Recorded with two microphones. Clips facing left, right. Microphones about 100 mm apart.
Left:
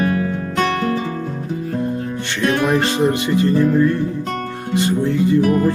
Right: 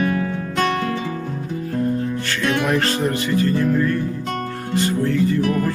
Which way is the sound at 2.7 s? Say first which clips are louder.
Left 3 dB; 15° left (ahead or behind).